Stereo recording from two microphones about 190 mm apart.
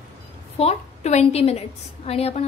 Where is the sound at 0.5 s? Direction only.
35° left (ahead or behind).